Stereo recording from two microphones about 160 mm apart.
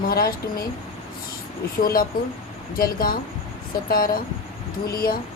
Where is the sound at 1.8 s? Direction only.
65° left (ahead or behind).